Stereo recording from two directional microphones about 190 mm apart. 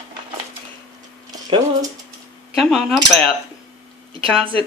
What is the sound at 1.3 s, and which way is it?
Speech, 20° right (ahead or behind).